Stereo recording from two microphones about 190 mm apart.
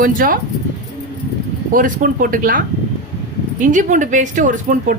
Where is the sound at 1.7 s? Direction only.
45° right (ahead or behind).